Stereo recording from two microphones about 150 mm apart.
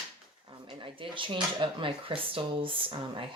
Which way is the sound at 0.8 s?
35° right (ahead or behind).